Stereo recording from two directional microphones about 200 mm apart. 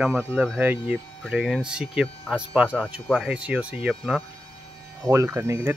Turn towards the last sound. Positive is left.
turn(degrees=-15)  # may be behind; listen again after turning